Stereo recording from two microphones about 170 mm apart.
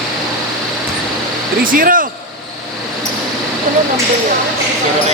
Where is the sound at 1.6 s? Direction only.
55° right (ahead or behind).